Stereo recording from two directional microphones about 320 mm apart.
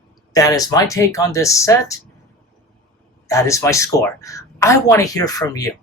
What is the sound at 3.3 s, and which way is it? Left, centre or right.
Speech, centre.